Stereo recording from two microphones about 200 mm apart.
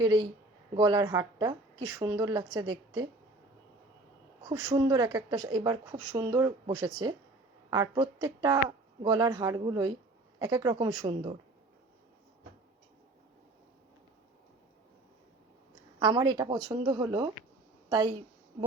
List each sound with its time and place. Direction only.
0.0 s speech: 20° right (ahead or behind)
4.4 s speech: 20° right (ahead or behind)
16.0 s speech: 20° right (ahead or behind)